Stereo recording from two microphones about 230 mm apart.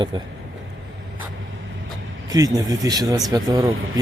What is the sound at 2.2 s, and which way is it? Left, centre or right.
Speech, centre.